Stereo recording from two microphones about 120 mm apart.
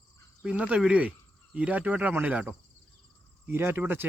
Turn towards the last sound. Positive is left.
turn(degrees=-15)  # may be behind; listen again after turning